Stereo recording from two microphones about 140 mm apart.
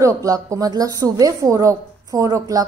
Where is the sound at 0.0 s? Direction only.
25° right (ahead or behind).